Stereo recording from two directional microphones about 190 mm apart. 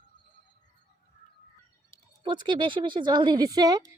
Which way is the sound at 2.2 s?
25° right (ahead or behind).